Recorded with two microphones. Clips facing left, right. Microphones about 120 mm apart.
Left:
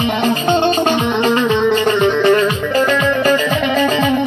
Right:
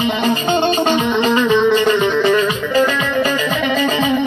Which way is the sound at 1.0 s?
50° left (ahead or behind).